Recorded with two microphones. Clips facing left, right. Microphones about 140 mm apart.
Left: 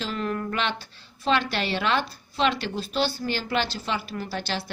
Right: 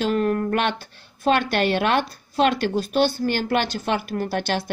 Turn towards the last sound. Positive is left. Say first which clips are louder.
# right 6 dB
turn(degrees=-55)  # may be behind; listen again after turning